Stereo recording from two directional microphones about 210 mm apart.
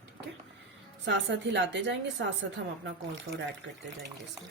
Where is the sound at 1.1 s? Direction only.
55° right (ahead or behind).